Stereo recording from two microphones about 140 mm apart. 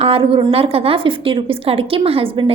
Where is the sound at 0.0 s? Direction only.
40° right (ahead or behind).